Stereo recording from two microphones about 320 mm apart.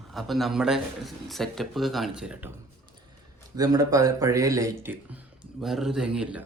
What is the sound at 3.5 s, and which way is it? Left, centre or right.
Speech, centre.